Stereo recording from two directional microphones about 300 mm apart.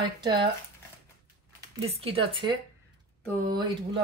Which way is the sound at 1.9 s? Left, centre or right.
Centre.